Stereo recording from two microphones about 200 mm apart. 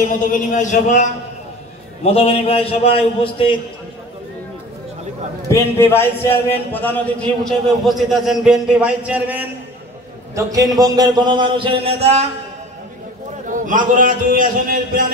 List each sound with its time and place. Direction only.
0.2 s a man's voice: 40° left (ahead or behind)
2.1 s a man's voice: 30° left (ahead or behind)
5.5 s speech: 10° left (ahead or behind); by 9.4 s 5° right (ahead or behind)
10.3 s a man's voice: 15° right (ahead or behind)
13.5 s a man's voice: 40° right (ahead or behind)